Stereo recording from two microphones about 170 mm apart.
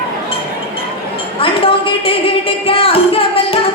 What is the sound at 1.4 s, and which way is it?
Music, 30° left (ahead or behind).